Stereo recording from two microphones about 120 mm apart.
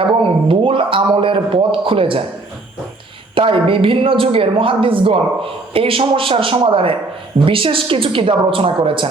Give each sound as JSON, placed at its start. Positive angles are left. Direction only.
{"t": 0.0, "sound": "speech", "side_deg": -45}
{"t": 3.3, "sound": "speech", "side_deg": -45}